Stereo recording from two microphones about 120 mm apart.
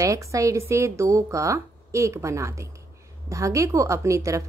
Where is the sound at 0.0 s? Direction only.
25° right (ahead or behind).